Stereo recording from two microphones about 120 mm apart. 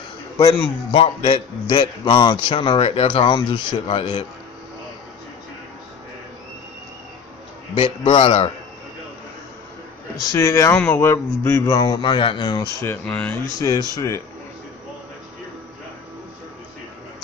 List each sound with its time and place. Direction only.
0.9 s a man's voice: 50° left (ahead or behind)
7.7 s a man's voice: 50° left (ahead or behind)
10.3 s a man's voice: 25° left (ahead or behind)
12.8 s speech: 10° left (ahead or behind)
13.6 s a man's voice: 30° left (ahead or behind)